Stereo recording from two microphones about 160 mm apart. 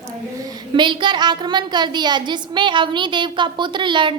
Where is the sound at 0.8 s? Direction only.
30° right (ahead or behind).